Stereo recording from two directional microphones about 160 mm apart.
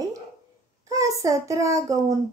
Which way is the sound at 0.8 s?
20° right (ahead or behind).